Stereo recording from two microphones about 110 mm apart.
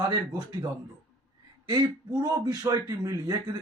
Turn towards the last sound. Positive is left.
turn(degrees=-35)  # may be behind; listen again after turning